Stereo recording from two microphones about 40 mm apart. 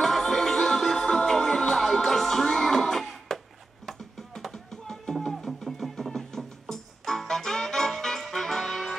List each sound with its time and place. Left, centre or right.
0.0 s music: centre
4.5 s a sound: centre
5.3 s music: centre